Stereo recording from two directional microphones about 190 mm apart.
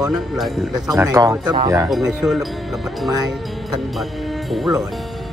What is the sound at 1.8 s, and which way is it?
Speech, 5° right (ahead or behind).